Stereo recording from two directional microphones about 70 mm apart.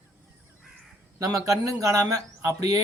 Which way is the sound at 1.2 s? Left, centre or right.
Right.